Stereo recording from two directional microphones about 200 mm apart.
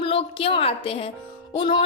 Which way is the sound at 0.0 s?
30° left (ahead or behind).